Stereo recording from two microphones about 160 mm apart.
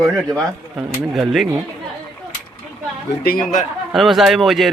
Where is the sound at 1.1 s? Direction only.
Centre (ahead or behind).